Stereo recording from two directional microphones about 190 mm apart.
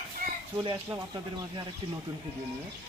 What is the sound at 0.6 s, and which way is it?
Speech, 25° right (ahead or behind).